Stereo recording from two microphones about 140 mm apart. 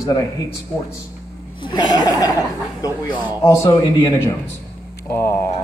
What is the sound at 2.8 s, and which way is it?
A man's voice, 25° left (ahead or behind).